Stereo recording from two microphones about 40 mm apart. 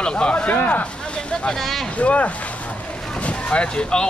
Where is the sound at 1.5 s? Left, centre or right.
Centre.